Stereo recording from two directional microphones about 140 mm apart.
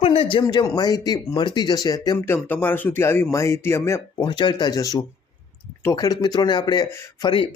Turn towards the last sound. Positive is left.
turn(degrees=35)  # may be behind; listen again after turning